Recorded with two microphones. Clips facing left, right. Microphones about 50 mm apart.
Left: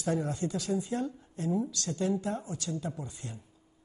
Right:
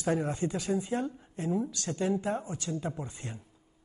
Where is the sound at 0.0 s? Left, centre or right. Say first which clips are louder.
Right 2 dB; right.